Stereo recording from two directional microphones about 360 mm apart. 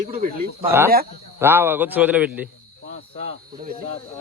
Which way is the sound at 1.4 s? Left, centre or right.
Centre.